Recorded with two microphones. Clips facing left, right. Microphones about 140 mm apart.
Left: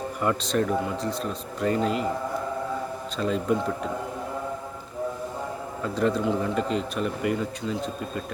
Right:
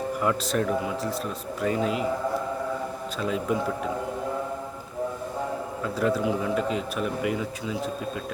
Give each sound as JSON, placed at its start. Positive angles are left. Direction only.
{"t": 0.2, "sound": "a man's voice", "side_deg": 0}
{"t": 3.2, "sound": "a man's voice", "side_deg": -5}
{"t": 5.8, "sound": "a man's voice", "side_deg": -5}